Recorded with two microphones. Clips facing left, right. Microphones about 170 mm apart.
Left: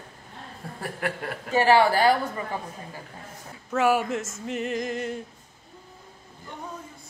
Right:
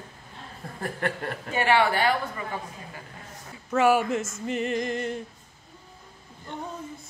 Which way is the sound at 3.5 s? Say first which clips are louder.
Right 1 dB; centre (ahead or behind).